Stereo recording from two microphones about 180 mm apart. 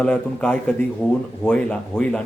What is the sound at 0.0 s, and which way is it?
A man's voice, 5° left (ahead or behind).